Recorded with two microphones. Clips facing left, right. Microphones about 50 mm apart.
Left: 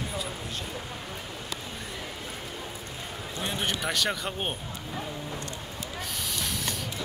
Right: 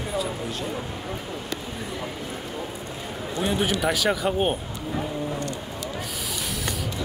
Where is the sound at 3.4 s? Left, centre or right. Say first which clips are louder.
Right 7 dB; centre.